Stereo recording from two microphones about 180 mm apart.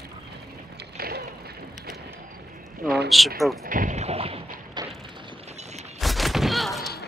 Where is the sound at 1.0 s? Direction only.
55° right (ahead or behind).